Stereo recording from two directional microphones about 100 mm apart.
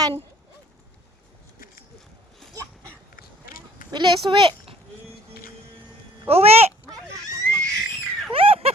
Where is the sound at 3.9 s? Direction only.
50° right (ahead or behind).